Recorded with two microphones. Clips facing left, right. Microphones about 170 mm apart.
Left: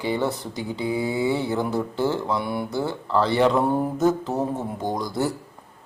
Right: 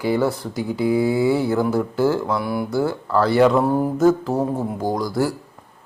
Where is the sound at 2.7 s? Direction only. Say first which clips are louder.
Right 4 dB; 20° left (ahead or behind).